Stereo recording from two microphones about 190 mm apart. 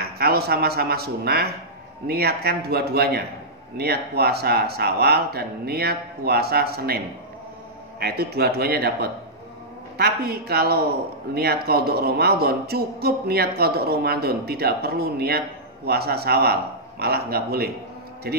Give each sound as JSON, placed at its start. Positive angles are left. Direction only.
{"t": 0.2, "sound": "speech", "side_deg": -55}
{"t": 8.0, "sound": "speech", "side_deg": -55}